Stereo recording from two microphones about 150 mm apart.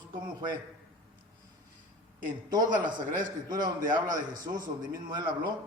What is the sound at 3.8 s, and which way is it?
A man's voice, 60° right (ahead or behind).